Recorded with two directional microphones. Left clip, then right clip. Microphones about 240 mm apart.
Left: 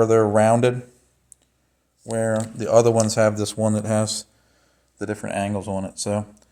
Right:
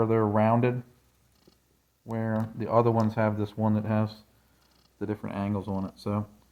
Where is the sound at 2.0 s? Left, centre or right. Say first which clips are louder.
Left 10 dB; left.